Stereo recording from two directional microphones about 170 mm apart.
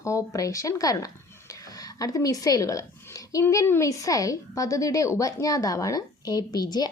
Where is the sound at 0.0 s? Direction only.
20° left (ahead or behind).